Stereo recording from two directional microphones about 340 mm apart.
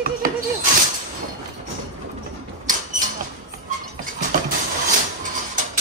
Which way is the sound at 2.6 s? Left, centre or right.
Right.